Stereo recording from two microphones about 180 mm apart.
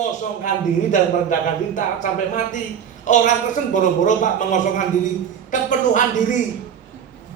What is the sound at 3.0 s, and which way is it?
A woman's voice, 45° left (ahead or behind).